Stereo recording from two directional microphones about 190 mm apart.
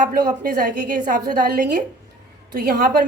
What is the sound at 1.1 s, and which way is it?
A woman's voice, 45° right (ahead or behind).